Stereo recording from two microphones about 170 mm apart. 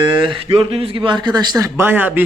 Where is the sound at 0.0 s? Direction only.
30° right (ahead or behind).